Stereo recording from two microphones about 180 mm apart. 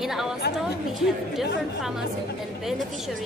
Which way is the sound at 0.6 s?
Centre (ahead or behind).